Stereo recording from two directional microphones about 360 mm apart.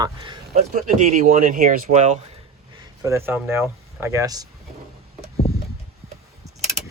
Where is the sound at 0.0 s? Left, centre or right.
Centre.